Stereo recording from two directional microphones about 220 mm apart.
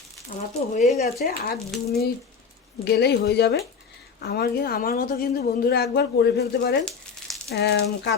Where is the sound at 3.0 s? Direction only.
45° left (ahead or behind).